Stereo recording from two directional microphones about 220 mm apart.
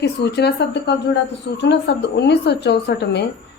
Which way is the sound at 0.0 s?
50° left (ahead or behind).